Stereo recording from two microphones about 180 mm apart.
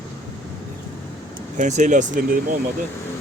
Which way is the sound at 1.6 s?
45° right (ahead or behind).